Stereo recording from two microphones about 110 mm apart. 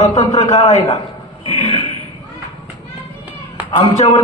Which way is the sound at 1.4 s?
70° left (ahead or behind).